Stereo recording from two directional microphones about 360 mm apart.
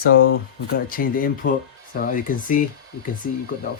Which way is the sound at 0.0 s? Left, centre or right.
Left.